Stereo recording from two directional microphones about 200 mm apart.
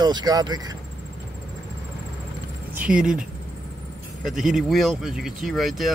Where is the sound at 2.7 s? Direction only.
5° right (ahead or behind).